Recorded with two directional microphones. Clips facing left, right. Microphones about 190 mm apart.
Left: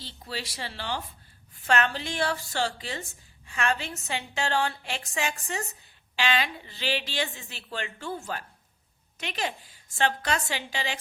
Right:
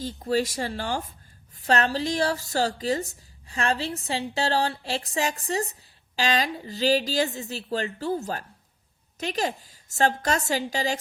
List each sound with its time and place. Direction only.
0.0 s a woman's voice: 45° right (ahead or behind)